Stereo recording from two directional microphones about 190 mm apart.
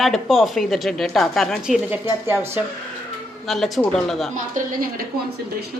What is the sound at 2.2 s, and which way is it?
Speech, 15° right (ahead or behind).